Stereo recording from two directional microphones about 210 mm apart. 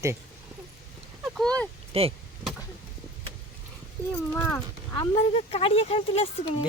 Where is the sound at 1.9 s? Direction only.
30° right (ahead or behind).